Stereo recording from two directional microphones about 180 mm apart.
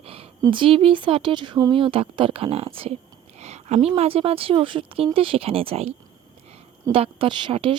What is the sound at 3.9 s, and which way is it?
Speech, 30° right (ahead or behind).